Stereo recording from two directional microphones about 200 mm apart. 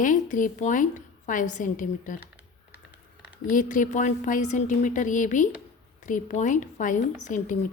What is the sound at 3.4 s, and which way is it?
A woman's voice, 40° left (ahead or behind).